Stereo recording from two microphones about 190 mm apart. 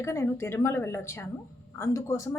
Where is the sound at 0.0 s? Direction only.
15° left (ahead or behind).